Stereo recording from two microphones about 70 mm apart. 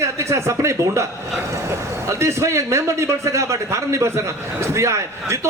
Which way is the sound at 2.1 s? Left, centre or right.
Right.